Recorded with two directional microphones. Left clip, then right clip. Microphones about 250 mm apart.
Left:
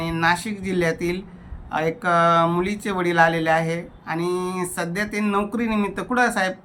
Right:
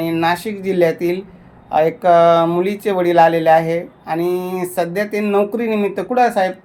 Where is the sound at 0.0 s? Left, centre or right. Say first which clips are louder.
Right 4 dB; centre.